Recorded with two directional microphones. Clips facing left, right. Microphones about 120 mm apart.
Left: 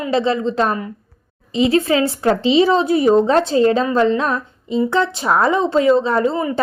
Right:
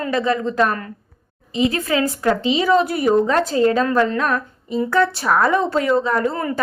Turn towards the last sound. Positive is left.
turn(degrees=25)  # may be behind; listen again after turning